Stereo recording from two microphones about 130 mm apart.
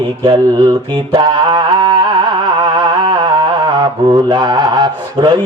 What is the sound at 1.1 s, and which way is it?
Music, 35° right (ahead or behind).